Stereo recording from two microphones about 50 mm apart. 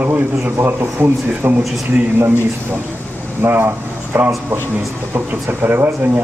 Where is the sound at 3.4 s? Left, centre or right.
Right.